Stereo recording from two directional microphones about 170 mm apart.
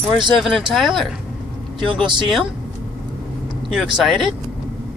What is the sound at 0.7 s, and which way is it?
Speech, centre (ahead or behind).